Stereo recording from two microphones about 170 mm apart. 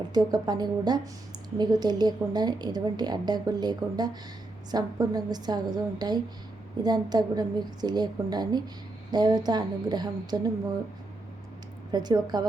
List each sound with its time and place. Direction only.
0.1 s a woman's voice: 25° right (ahead or behind)
11.9 s a woman's voice: 25° right (ahead or behind)